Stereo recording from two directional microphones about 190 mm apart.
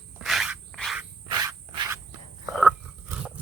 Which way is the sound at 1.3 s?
20° right (ahead or behind).